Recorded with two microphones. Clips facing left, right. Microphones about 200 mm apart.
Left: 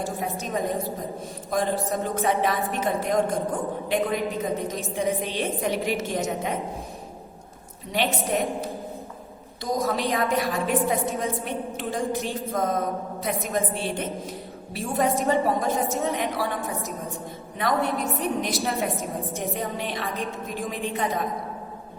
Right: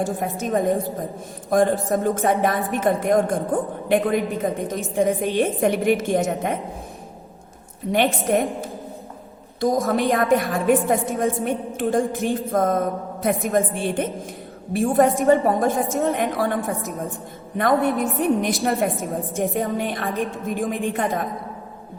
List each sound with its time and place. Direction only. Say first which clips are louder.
0.3 s a woman's voice: right 9 dB; 55° right (ahead or behind)
7.9 s a woman's voice: right 6 dB; 50° right (ahead or behind)
9.6 s a woman's voice: right 6 dB; 50° right (ahead or behind)
17.6 s a woman's voice: right 6 dB; 50° right (ahead or behind)